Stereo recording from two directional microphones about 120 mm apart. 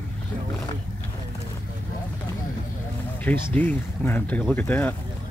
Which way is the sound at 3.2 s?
15° left (ahead or behind).